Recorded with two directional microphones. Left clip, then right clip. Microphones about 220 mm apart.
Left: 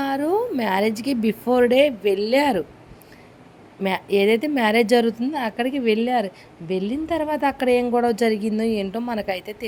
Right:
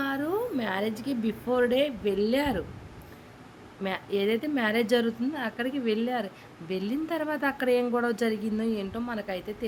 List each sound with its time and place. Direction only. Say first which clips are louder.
0.0 s a woman's voice: left 7 dB; 25° left (ahead or behind)
3.8 s speech: left 9 dB; 30° left (ahead or behind)